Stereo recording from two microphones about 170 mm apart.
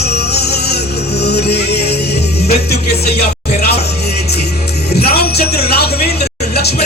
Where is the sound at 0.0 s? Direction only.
70° left (ahead or behind).